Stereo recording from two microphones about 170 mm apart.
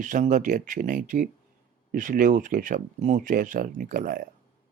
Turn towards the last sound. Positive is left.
turn(degrees=-55)  # may be behind; listen again after turning